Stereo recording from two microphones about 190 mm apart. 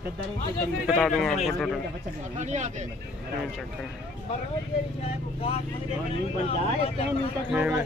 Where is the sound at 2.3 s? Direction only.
40° right (ahead or behind).